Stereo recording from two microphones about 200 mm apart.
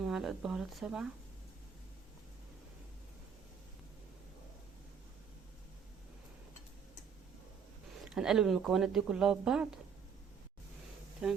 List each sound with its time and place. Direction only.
0.0 s speech: centre (ahead or behind)
8.0 s speech: centre (ahead or behind)
11.2 s speech: 5° right (ahead or behind)